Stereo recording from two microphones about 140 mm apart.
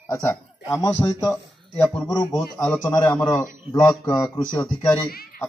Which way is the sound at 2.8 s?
30° left (ahead or behind).